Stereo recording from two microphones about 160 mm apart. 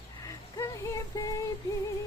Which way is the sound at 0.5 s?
20° left (ahead or behind).